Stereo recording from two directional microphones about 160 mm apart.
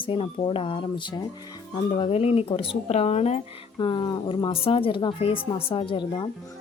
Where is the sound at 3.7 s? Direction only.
30° left (ahead or behind).